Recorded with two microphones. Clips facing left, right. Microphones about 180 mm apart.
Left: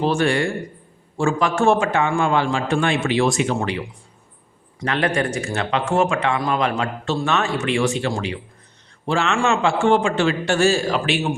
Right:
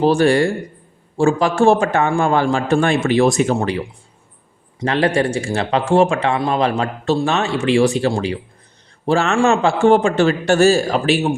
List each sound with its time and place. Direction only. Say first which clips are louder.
0.0 s speech: right 6 dB; 35° right (ahead or behind)